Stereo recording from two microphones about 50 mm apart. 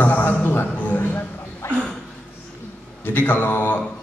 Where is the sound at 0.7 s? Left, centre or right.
Left.